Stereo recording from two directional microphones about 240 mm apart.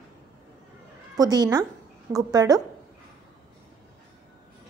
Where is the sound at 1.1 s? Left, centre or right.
Centre.